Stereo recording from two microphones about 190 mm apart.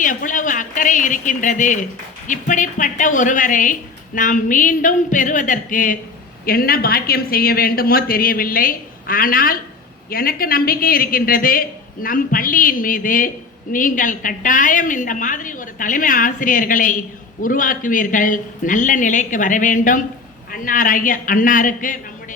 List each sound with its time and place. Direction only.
0.0 s a woman's voice: 45° left (ahead or behind)